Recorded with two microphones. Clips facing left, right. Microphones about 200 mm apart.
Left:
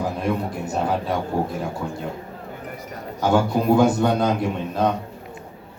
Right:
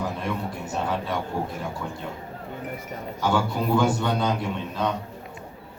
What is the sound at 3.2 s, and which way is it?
Speech, 40° left (ahead or behind).